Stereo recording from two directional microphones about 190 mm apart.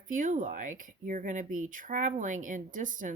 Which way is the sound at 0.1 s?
45° right (ahead or behind).